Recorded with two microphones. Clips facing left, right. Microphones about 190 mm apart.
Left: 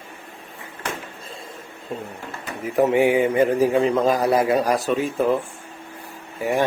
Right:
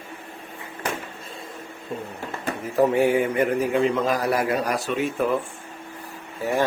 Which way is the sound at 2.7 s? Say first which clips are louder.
Left 2 dB; 20° left (ahead or behind).